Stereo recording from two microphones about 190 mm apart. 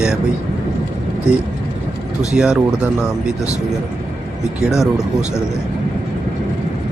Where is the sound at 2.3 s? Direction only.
5° right (ahead or behind).